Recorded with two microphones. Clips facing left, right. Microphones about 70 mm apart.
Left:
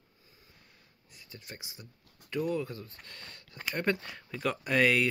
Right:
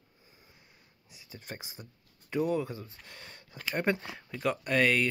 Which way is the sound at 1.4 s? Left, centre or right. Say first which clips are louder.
Right 5 dB; right.